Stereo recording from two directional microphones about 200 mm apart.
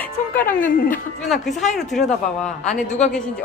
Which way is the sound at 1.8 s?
Centre (ahead or behind).